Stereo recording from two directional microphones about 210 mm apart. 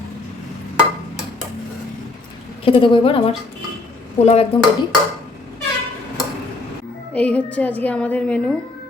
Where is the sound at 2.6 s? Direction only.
25° left (ahead or behind).